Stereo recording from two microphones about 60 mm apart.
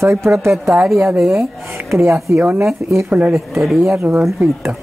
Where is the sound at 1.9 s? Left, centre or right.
Right.